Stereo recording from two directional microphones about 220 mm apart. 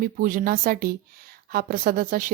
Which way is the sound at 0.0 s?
40° right (ahead or behind).